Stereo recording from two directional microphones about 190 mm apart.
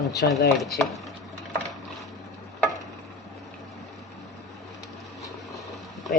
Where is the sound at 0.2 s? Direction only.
55° left (ahead or behind).